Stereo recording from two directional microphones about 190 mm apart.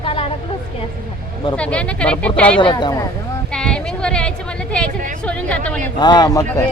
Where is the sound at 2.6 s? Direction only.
25° left (ahead or behind).